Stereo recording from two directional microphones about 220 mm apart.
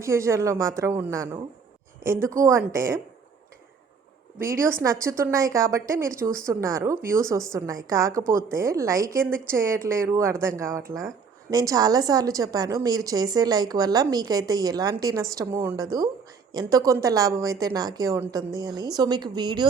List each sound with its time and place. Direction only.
0.0 s a woman's voice: 15° right (ahead or behind)
4.6 s a woman's voice: 15° right (ahead or behind)
8.2 s a woman's voice: 40° right (ahead or behind)
8.4 s a woman's voice: 15° right (ahead or behind)